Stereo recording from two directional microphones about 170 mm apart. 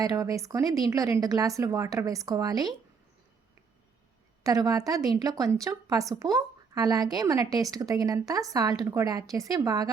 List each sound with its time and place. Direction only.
0.0 s a woman's voice: 20° right (ahead or behind)
4.4 s a woman's voice: 20° right (ahead or behind)